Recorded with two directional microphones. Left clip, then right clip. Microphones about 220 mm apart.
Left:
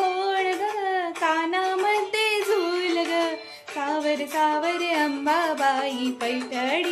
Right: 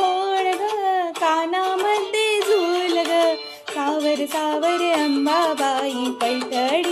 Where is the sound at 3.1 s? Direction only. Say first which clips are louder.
Right 7 dB; 25° right (ahead or behind).